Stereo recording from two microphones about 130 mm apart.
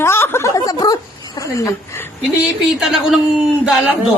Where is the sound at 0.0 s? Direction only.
20° left (ahead or behind).